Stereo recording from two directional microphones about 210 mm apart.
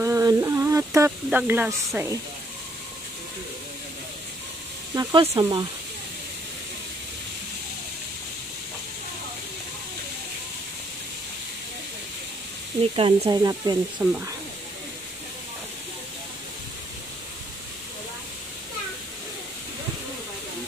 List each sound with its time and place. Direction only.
0.0 s speech: 15° right (ahead or behind)
4.9 s speech: 20° right (ahead or behind)
12.9 s speech: 25° right (ahead or behind)